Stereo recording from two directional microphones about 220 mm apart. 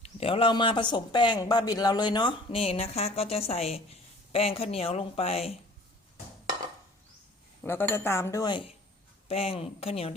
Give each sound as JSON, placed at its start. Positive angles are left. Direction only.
{"t": 0.0, "sound": "speech", "side_deg": 25}
{"t": 7.6, "sound": "speech", "side_deg": 10}